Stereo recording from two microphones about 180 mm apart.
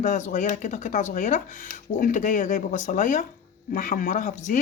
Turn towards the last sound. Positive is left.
turn(degrees=45)  # may be behind; listen again after turning